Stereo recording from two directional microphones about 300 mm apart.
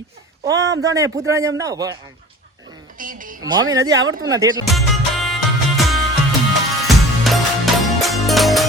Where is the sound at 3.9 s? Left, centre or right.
Right.